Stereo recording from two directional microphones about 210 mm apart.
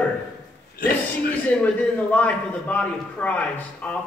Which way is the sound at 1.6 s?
5° left (ahead or behind).